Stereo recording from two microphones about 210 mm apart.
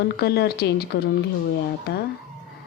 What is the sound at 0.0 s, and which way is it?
Speech, 50° left (ahead or behind).